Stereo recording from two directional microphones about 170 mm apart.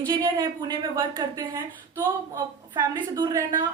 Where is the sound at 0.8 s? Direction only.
20° right (ahead or behind).